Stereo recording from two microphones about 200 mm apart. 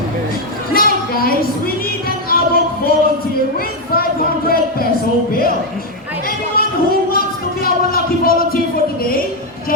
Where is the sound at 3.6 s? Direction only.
50° left (ahead or behind).